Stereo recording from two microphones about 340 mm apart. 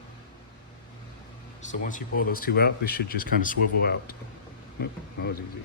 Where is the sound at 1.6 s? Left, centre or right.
Left.